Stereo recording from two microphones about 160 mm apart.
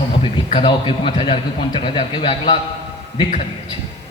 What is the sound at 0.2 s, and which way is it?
A man's voice, 35° left (ahead or behind).